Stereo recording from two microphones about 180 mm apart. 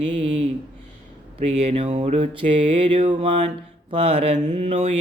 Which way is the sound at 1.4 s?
35° right (ahead or behind).